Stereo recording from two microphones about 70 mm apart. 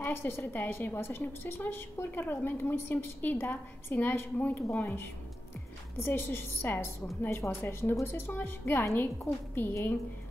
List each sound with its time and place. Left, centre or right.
0.0 s a woman's voice: left